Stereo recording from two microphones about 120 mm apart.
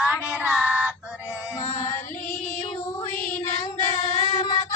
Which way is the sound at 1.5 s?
25° left (ahead or behind).